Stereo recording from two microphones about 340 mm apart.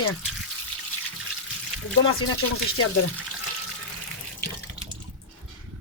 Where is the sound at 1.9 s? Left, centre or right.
Left.